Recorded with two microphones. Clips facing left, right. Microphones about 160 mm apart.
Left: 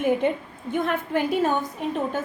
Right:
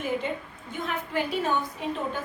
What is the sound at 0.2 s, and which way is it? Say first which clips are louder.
A woman's voice: left 8 dB; 55° left (ahead or behind).